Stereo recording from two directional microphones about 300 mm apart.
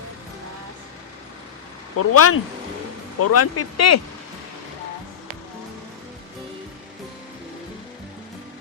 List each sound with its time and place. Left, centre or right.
2.0 s speech: left